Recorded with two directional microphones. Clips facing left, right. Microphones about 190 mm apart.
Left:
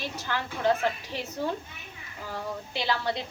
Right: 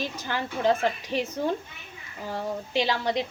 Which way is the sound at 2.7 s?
15° right (ahead or behind).